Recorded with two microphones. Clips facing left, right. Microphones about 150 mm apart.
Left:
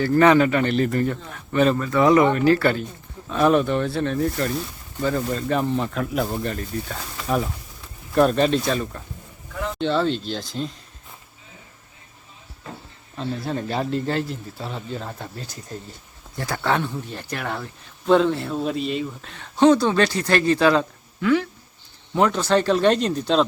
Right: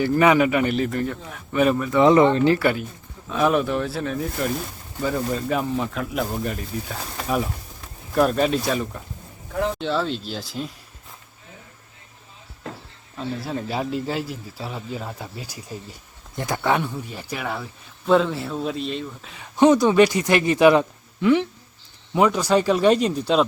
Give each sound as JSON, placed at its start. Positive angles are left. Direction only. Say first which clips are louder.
{"t": 0.0, "sound": "a man's voice", "louder": "left 1 dB", "side_deg": -10}
{"t": 3.2, "sound": "a man's voice", "louder": "left 2 dB", "side_deg": 0}
{"t": 13.1, "sound": "a man's voice", "louder": "left 1 dB", "side_deg": -5}
{"t": 19.5, "sound": "a man's voice", "louder": "right 1 dB", "side_deg": -15}
{"t": 22.1, "sound": "a man's voice", "louder": "right 1 dB", "side_deg": -10}